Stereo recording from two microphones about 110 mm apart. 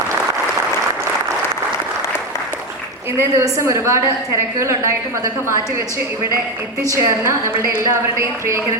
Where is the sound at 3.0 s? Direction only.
25° right (ahead or behind).